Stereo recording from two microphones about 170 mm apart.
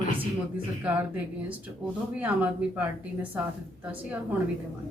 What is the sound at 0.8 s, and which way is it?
Speech, 5° right (ahead or behind).